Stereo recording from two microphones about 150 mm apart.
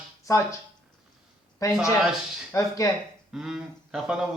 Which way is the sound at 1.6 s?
20° left (ahead or behind).